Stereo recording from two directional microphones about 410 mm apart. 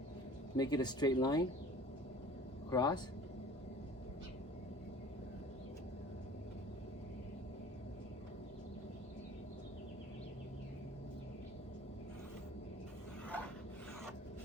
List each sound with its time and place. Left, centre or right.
0.5 s speech: centre
2.6 s speech: centre